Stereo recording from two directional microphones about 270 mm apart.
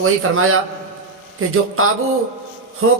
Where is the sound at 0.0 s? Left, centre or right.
Right.